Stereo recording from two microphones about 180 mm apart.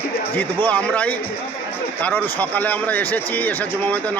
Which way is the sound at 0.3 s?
10° left (ahead or behind).